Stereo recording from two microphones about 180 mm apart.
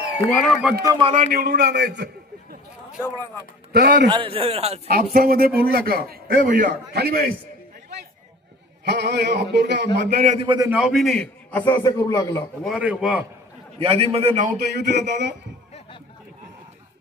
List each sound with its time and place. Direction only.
0.3 s a man's voice: centre (ahead or behind)
0.8 s a man's voice: 25° right (ahead or behind)
1.1 s a man's voice: 40° right (ahead or behind)
1.4 s a sound: 65° right (ahead or behind)
3.7 s a man's voice: 65° right (ahead or behind)
4.1 s a man's voice: 30° right (ahead or behind)
4.8 s a man's voice: 55° right (ahead or behind)
6.9 s a man's voice: 60° right (ahead or behind)
8.8 s a sound: 70° right (ahead or behind)
10.4 s a man's voice: 25° right (ahead or behind)
10.7 s a man's voice: 5° right (ahead or behind); by 12.4 s 15° left (ahead or behind)
12.6 s a man's voice: 5° right (ahead or behind)
13.7 s a man's voice: 30° right (ahead or behind)
14.6 s a sound: 65° right (ahead or behind)